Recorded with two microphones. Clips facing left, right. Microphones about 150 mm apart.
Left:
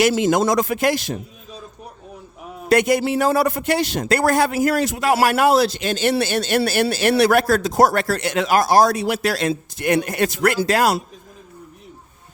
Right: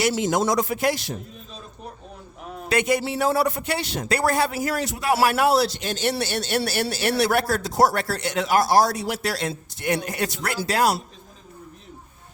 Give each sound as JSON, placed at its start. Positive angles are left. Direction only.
{"t": 0.0, "sound": "a man's voice", "side_deg": 90}
{"t": 2.8, "sound": "a man's voice", "side_deg": 85}